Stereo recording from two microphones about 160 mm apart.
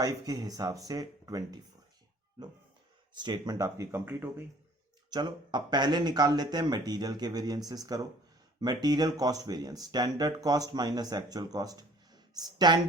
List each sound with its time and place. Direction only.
0.0 s speech: 25° right (ahead or behind)
3.2 s speech: 25° right (ahead or behind)
5.1 s speech: 30° right (ahead or behind)